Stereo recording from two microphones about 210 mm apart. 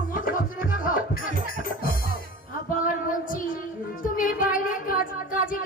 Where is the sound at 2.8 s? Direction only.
40° left (ahead or behind).